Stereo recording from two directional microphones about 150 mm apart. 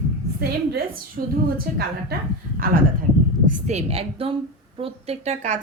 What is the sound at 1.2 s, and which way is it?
Speech, 85° right.